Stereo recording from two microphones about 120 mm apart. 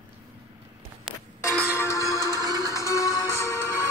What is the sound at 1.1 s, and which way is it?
Music, 5° right (ahead or behind).